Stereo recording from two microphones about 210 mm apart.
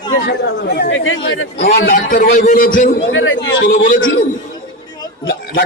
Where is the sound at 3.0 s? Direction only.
70° left (ahead or behind).